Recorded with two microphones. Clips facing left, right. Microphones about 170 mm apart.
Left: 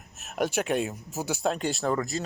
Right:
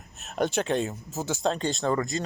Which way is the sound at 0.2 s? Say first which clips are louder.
Right 1 dB; centre (ahead or behind).